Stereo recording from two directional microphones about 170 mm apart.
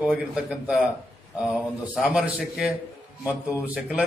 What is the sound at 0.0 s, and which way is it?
A man's voice, 5° right (ahead or behind).